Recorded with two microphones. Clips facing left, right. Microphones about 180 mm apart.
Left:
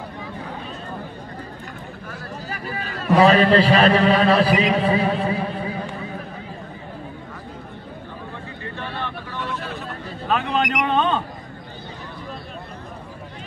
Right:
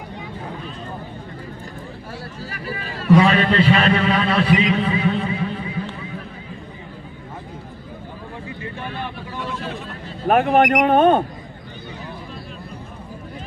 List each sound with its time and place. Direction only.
3.2 s a man's voice: 35° left (ahead or behind)
10.2 s speech: 60° right (ahead or behind)